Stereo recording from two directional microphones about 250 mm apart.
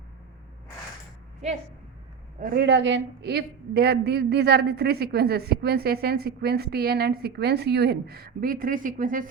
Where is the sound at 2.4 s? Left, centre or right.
Right.